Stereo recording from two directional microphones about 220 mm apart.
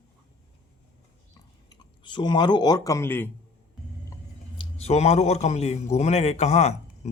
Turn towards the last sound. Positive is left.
turn(degrees=30)  # may be behind; listen again after turning